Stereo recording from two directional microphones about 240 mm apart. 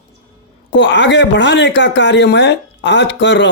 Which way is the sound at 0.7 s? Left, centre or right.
Left.